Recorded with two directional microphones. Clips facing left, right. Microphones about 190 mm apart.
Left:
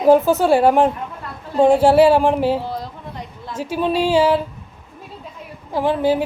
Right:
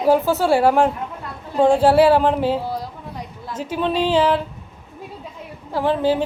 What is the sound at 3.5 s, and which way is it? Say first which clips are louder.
Speech: left 2 dB; 10° left (ahead or behind).